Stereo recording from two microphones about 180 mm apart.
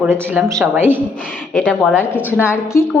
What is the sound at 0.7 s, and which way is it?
Speech, 10° right (ahead or behind).